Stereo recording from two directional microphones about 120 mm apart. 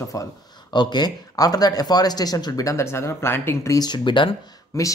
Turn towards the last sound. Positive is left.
turn(degrees=30)  # may be behind; listen again after turning